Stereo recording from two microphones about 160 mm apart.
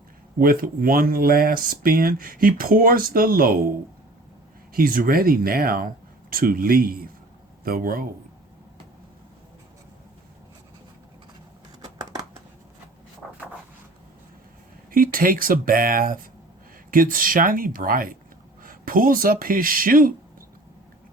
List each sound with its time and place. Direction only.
0.3 s speech: 65° right (ahead or behind)
4.7 s speech: 60° right (ahead or behind)
14.8 s speech: 60° right (ahead or behind)